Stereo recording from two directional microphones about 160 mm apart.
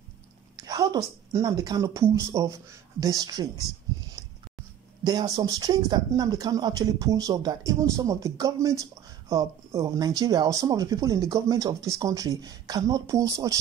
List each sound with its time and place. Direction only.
0.6 s speech: 20° right (ahead or behind)
5.0 s speech: 25° right (ahead or behind)